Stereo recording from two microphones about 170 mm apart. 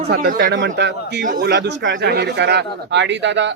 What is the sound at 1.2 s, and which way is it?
Speech, 65° right (ahead or behind).